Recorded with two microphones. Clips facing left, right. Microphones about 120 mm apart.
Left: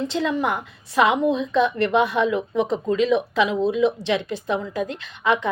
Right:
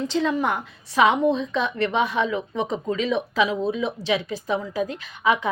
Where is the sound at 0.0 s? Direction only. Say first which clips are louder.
Even; centre (ahead or behind).